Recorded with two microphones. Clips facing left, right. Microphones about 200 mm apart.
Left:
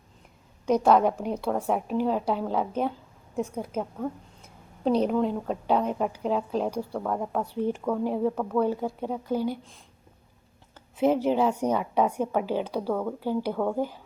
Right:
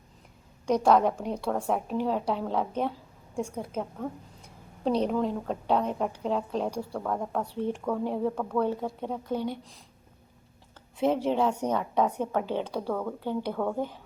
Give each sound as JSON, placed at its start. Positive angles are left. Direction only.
{"t": 0.6, "sound": "a woman's voice", "side_deg": 5}
{"t": 10.9, "sound": "a woman's voice", "side_deg": 5}